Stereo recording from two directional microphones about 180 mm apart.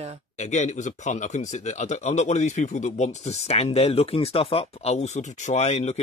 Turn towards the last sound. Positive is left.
turn(degrees=40)  # may be behind; listen again after turning